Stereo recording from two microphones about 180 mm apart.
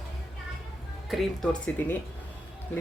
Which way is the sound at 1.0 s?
Centre (ahead or behind).